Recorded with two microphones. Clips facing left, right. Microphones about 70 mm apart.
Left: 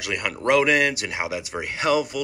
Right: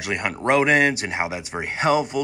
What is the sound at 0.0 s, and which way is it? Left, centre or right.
Speech, right.